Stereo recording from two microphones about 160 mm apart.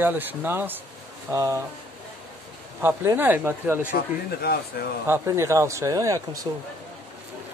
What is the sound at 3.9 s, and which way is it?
Speech, 70° left (ahead or behind).